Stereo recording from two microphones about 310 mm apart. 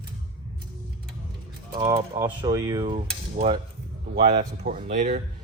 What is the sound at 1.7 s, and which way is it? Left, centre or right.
Speech, centre.